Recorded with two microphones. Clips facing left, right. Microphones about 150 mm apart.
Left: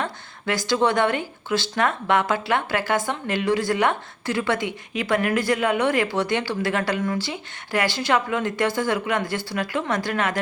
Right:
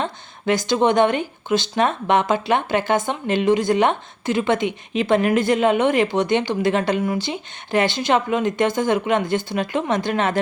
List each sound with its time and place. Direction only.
0.0 s speech: 20° right (ahead or behind)